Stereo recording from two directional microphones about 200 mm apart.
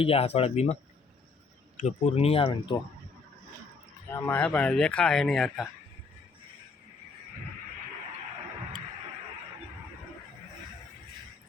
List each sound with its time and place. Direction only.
0.0 s speech: 30° left (ahead or behind)
4.1 s speech: 10° left (ahead or behind)